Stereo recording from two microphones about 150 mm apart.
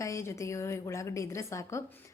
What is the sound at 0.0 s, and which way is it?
A woman's voice, 20° left (ahead or behind).